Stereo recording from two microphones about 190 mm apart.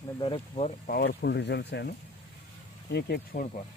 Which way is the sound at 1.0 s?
60° left (ahead or behind).